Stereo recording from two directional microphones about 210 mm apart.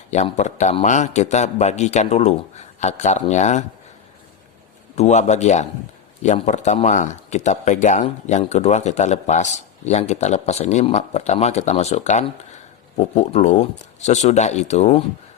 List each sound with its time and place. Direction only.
0.1 s a man's voice: 35° left (ahead or behind)
4.9 s a man's voice: 35° left (ahead or behind)